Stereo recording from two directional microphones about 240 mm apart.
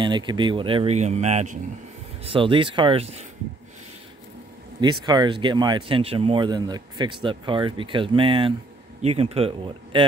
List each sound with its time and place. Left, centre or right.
0.0 s speech: centre
5.0 s a man's voice: centre